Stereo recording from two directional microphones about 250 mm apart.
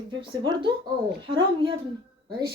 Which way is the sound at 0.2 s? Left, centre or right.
Centre.